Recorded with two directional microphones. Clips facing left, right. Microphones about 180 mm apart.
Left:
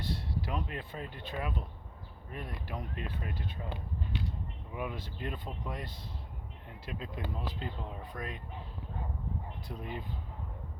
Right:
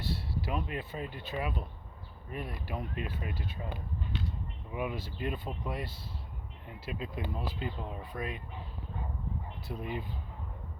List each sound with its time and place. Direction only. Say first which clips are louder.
0.0 s speech: right 1 dB; 5° right (ahead or behind)
9.6 s speech: right 5 dB; 10° right (ahead or behind)